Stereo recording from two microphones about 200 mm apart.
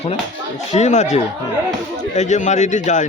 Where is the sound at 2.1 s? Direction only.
35° left (ahead or behind).